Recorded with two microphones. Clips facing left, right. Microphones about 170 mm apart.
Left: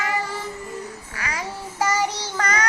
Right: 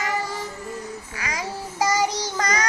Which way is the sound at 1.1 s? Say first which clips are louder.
Even; 15° right (ahead or behind).